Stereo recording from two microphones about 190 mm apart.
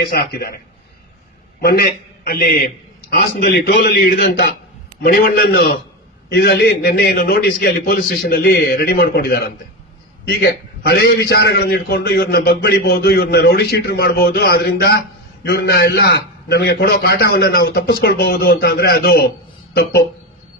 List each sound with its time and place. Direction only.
0.1 s a man's voice: 55° left (ahead or behind)
1.6 s a man's voice: 55° left (ahead or behind)